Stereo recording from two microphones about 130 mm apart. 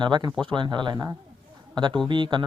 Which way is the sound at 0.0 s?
35° right (ahead or behind).